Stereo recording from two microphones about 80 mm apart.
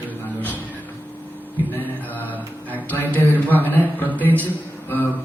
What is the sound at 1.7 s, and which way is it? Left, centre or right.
Speech, left.